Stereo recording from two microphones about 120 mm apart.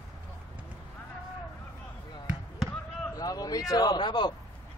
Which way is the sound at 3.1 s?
30° left (ahead or behind).